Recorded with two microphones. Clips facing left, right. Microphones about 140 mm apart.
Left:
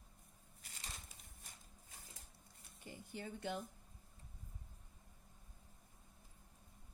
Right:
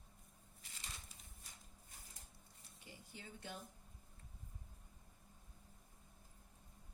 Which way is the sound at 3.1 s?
60° left (ahead or behind).